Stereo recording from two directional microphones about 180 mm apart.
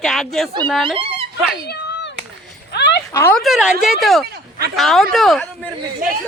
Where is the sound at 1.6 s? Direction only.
80° left.